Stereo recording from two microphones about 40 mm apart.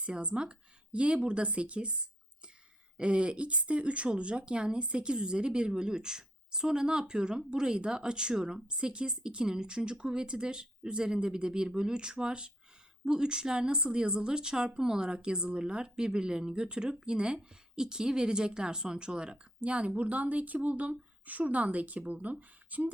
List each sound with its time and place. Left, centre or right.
0.0 s a woman's voice: right